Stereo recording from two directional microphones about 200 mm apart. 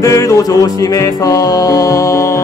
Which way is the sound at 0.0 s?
15° left (ahead or behind).